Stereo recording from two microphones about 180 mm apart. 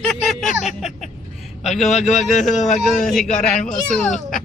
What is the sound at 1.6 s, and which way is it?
Speech, centre (ahead or behind).